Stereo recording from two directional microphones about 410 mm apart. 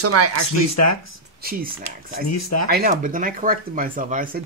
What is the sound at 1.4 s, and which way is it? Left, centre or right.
Speech, right.